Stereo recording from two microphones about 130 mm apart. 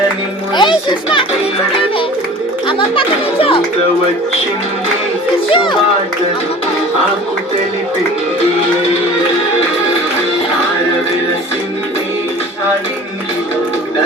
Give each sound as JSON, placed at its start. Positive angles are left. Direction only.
{"t": 0.5, "sound": "children playing", "side_deg": 35}
{"t": 2.6, "sound": "music", "side_deg": 40}